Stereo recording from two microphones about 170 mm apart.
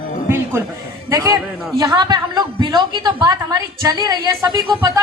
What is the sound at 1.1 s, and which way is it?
A woman's voice, 20° right (ahead or behind).